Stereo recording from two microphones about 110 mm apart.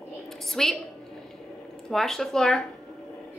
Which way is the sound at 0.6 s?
5° left (ahead or behind).